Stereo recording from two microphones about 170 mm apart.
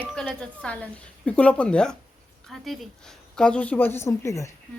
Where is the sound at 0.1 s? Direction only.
5° left (ahead or behind).